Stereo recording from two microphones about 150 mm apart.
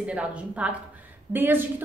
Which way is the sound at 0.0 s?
10° right (ahead or behind).